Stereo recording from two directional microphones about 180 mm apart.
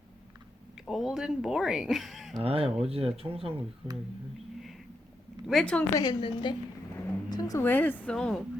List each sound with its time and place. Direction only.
0.8 s speech: centre (ahead or behind)
2.4 s speech: 35° right (ahead or behind)
5.5 s speech: 5° left (ahead or behind)
5.9 s a woman's voice: 25° left (ahead or behind); by 8.4 s centre (ahead or behind)